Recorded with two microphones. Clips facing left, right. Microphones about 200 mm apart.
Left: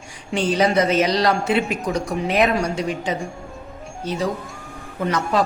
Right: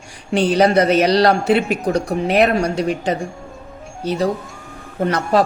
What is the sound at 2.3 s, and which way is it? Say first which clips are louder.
Speech: right 4 dB; 65° right (ahead or behind).